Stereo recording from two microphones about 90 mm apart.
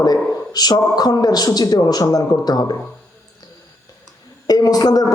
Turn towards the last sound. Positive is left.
turn(degrees=45)  # may be behind; listen again after turning